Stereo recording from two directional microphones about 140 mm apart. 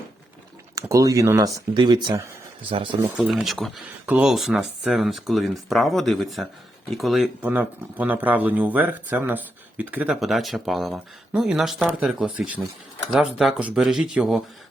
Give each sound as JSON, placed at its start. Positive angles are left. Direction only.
{"t": 0.8, "sound": "speech", "side_deg": -25}
{"t": 3.2, "sound": "speech", "side_deg": -5}
{"t": 7.4, "sound": "speech", "side_deg": -10}